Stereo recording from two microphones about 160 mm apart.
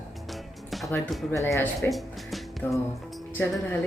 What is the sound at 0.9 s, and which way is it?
Speech, 15° left (ahead or behind).